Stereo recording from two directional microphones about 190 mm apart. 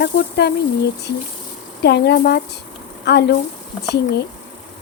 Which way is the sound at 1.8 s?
60° left (ahead or behind).